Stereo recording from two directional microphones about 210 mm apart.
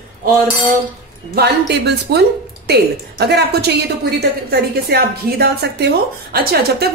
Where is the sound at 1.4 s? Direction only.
50° right (ahead or behind).